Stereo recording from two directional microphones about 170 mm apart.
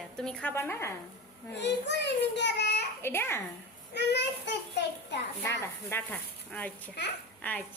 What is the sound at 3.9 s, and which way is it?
Speech, 90° left.